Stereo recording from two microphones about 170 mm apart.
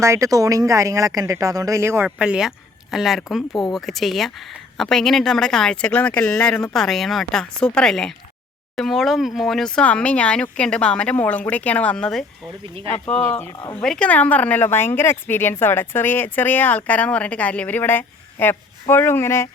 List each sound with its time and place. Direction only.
0.0 s speech: 15° right (ahead or behind); by 19.5 s 15° left (ahead or behind)